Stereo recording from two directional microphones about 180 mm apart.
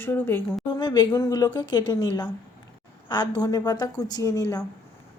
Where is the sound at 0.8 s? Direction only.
25° left (ahead or behind).